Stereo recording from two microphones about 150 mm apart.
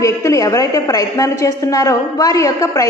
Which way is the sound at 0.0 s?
20° left (ahead or behind).